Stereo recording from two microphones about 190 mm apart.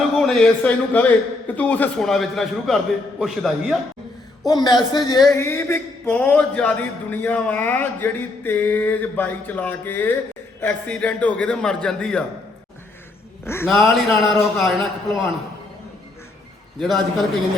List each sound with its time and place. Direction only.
0.2 s a man's voice: centre (ahead or behind)
4.4 s a woman's voice: 20° left (ahead or behind); by 12.2 s 5° left (ahead or behind)
13.4 s a man's voice: 10° left (ahead or behind)
13.7 s a man's voice: centre (ahead or behind)
16.8 s a man's voice: centre (ahead or behind)